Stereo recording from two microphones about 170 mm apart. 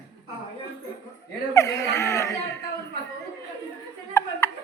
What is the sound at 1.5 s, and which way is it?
Chuckle, 20° left (ahead or behind).